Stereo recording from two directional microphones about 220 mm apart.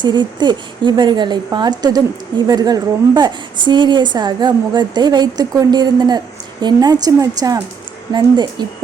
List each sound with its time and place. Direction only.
0.0 s a woman's voice: 20° right (ahead or behind)